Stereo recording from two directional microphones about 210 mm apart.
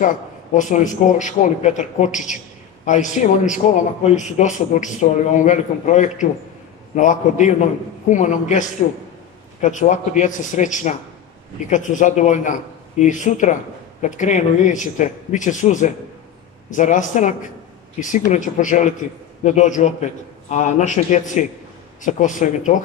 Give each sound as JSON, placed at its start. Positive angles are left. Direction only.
{"t": 0.6, "sound": "a man's voice", "side_deg": 35}